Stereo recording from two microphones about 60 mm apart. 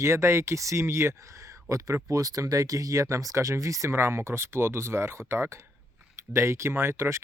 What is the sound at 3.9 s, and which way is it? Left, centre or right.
Speech, right.